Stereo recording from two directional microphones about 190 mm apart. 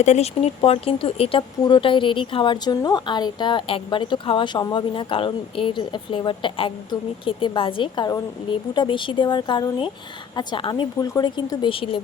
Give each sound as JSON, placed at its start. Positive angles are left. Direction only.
{"t": 0.0, "sound": "speech", "side_deg": 35}